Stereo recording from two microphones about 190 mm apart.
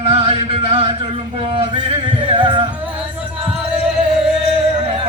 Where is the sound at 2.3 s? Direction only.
25° right (ahead or behind).